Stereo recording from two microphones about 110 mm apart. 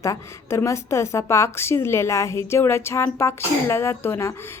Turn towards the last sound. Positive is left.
turn(degrees=20)  # may be behind; listen again after turning